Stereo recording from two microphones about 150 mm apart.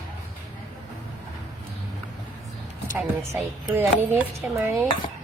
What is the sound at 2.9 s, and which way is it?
Speech, 15° right (ahead or behind).